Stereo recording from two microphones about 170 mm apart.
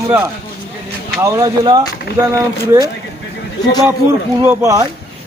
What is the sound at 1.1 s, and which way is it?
Speech, 15° right (ahead or behind).